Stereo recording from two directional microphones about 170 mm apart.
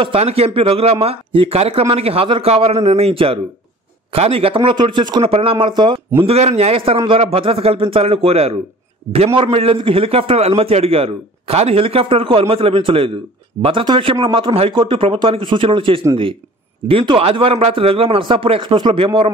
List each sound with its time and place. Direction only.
0.0 s a man's voice: 35° right (ahead or behind)